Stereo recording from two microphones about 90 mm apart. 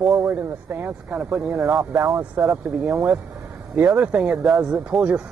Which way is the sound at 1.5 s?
35° right (ahead or behind).